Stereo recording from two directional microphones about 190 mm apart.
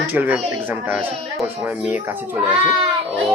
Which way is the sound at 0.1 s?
10° right (ahead or behind).